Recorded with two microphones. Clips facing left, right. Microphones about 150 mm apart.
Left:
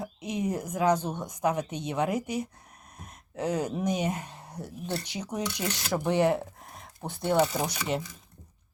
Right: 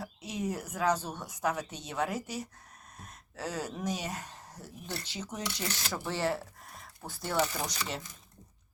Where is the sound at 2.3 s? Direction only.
15° left (ahead or behind).